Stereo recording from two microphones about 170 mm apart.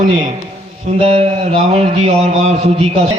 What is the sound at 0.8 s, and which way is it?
A man's voice, 35° right (ahead or behind).